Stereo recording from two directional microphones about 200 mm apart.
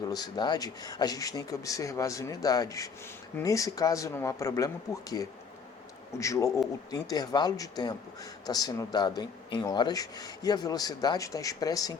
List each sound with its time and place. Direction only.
0.1 s speech: 20° left (ahead or behind)